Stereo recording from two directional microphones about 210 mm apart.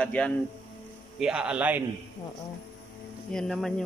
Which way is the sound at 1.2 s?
5° right (ahead or behind).